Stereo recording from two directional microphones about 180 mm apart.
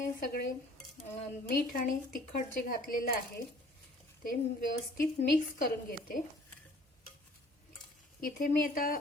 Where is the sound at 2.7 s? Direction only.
55° left (ahead or behind).